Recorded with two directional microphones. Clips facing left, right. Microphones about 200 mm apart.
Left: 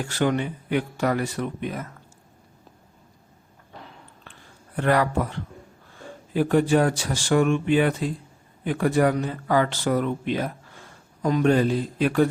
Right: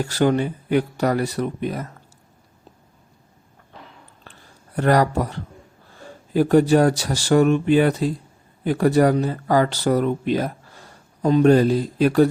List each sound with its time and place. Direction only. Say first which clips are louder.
0.0 s speech: right 4 dB; 40° right (ahead or behind)
4.8 s speech: right 3 dB; 40° right (ahead or behind)